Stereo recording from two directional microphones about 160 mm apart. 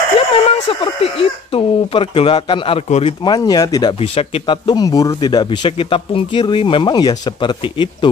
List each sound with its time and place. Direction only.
0.3 s speech: 35° left (ahead or behind)
3.3 s speech: 25° left (ahead or behind)
4.0 s speech: 35° left (ahead or behind)